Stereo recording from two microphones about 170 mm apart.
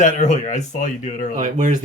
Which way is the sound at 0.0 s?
45° left (ahead or behind).